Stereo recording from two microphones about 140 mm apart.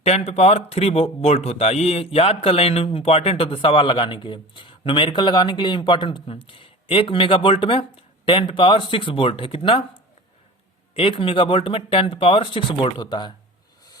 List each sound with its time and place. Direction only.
0.0 s speech: 45° left (ahead or behind)
10.9 s speech: 40° left (ahead or behind)